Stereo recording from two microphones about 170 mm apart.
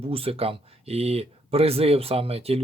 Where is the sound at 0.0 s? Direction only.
35° right (ahead or behind).